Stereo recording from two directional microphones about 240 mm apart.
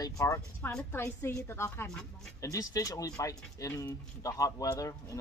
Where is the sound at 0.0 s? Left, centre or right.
Centre.